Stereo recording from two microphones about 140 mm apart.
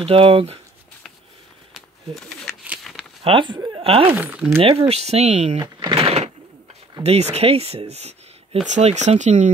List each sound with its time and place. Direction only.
0.0 s speech: 40° right (ahead or behind)
1.7 s a sound: centre (ahead or behind)
3.3 s speech: 35° right (ahead or behind)
4.1 s speech: 10° right (ahead or behind)
4.6 s speech: 45° right (ahead or behind)
5.6 s a sound: 35° right (ahead or behind)
7.0 s speech: 50° right (ahead or behind)